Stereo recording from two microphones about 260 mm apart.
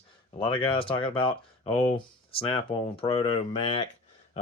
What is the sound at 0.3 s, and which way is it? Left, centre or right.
Speech, centre.